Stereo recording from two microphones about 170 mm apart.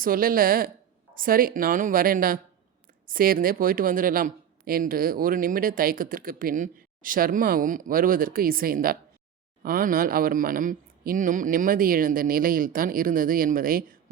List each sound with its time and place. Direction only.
0.0 s a woman's voice: 55° right (ahead or behind)